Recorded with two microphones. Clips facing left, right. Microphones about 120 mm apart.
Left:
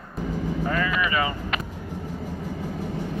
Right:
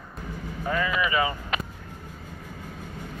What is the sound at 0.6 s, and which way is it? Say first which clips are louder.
Speech: right 1 dB; 15° right (ahead or behind).